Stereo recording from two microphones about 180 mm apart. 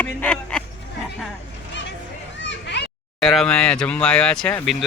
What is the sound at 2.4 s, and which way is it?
Children playing, 75° left (ahead or behind).